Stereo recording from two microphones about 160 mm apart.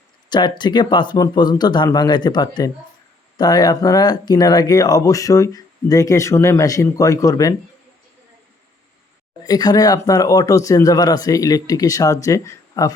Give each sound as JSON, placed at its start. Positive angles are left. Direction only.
{"t": 0.3, "sound": "speech", "side_deg": 30}
{"t": 9.4, "sound": "speech", "side_deg": 25}